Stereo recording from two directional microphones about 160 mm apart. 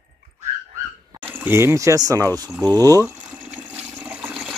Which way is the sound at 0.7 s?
15° right (ahead or behind).